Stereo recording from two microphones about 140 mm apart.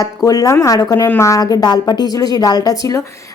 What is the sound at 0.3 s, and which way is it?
Speech, 25° left (ahead or behind).